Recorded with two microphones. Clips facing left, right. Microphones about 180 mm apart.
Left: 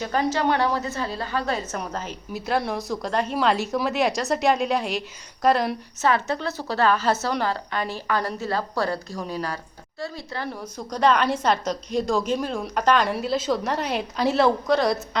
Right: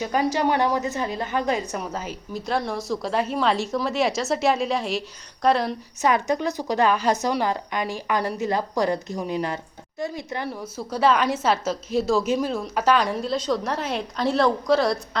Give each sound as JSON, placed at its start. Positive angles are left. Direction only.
{"t": 0.0, "sound": "a woman's voice", "side_deg": -10}
{"t": 1.7, "sound": "a woman's voice", "side_deg": -5}
{"t": 2.3, "sound": "a woman's voice", "side_deg": 5}
{"t": 6.0, "sound": "a woman's voice", "side_deg": -15}
{"t": 10.5, "sound": "a woman's voice", "side_deg": -5}